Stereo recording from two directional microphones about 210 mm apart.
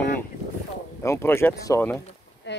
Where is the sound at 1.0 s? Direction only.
10° left (ahead or behind).